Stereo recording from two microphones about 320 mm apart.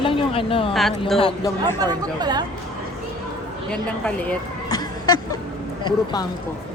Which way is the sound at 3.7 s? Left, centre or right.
Centre.